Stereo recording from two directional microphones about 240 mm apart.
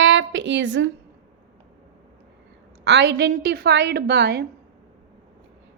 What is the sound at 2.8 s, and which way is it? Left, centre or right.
A woman's voice, right.